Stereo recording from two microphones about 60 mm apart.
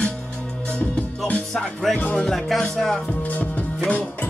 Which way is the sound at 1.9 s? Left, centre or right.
Centre.